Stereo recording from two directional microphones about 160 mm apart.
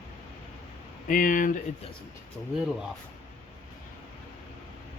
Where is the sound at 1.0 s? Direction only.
60° left (ahead or behind).